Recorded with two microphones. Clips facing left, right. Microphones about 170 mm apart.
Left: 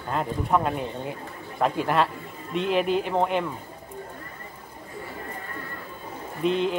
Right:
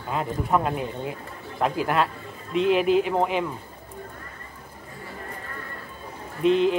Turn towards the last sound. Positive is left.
turn(degrees=0)  # may be behind; listen again after turning